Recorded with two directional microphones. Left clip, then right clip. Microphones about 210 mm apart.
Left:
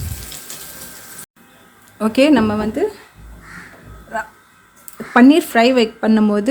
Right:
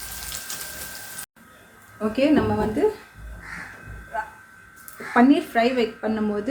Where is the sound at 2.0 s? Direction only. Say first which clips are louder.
Left 7 dB; 55° left (ahead or behind).